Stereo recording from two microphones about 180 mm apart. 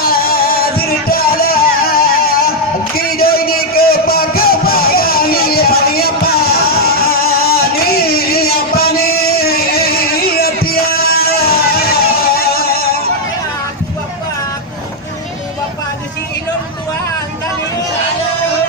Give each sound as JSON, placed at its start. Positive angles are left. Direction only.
{"t": 0.0, "sound": "music", "side_deg": 55}
{"t": 2.9, "sound": "a sound", "side_deg": 55}
{"t": 12.4, "sound": "music", "side_deg": 55}